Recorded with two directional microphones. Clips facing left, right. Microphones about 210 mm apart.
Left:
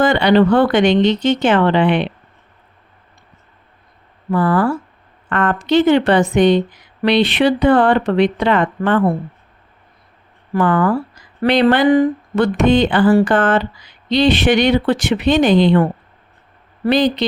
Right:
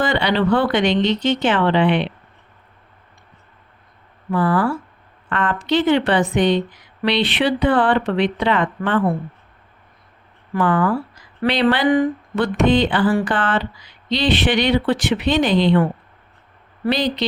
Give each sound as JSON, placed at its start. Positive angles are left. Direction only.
{"t": 0.0, "sound": "speech", "side_deg": 45}
{"t": 4.3, "sound": "speech", "side_deg": 45}
{"t": 10.5, "sound": "speech", "side_deg": 45}